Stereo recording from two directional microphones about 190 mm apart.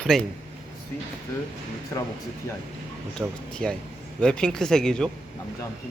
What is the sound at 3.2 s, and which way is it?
Speech, 5° left (ahead or behind).